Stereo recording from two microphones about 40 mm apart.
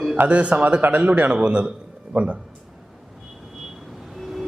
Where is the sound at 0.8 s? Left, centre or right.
Right.